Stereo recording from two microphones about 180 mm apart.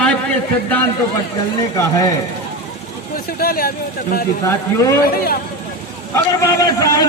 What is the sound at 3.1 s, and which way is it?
Speech, 55° left (ahead or behind).